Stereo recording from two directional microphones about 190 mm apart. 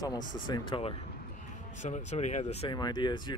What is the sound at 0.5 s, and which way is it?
Speech, 25° left (ahead or behind).